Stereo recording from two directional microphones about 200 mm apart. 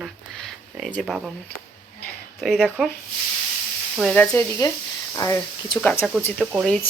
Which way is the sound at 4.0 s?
5° left (ahead or behind).